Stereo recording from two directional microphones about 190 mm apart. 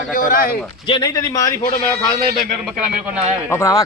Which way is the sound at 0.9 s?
20° left (ahead or behind).